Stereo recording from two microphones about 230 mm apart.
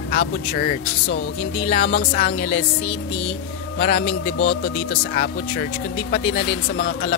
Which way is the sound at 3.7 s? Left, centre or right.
Left.